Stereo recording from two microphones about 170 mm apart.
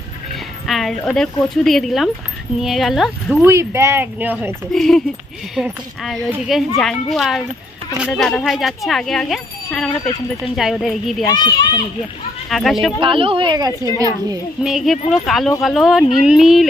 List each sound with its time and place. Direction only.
0.7 s speech: centre (ahead or behind)
3.4 s speech: 15° right (ahead or behind)
4.7 s speech: 5° left (ahead or behind)
9.8 s speech: 30° left (ahead or behind)
10.5 s speech: centre (ahead or behind)
11.2 s a child's voice: 25° left (ahead or behind)
12.4 s speech: centre (ahead or behind)
13.0 s a woman's voice: 30° right (ahead or behind)
14.6 s speech: centre (ahead or behind)